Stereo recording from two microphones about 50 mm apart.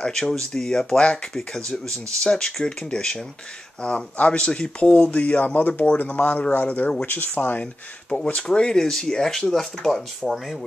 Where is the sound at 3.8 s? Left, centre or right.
Left.